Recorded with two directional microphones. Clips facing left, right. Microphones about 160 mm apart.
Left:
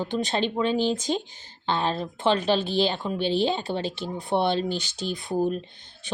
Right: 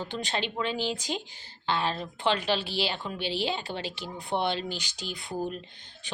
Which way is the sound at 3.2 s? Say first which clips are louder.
Left 7 dB; 45° left (ahead or behind).